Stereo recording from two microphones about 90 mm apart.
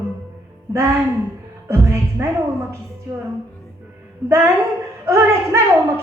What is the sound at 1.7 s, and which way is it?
Speech, 30° right (ahead or behind).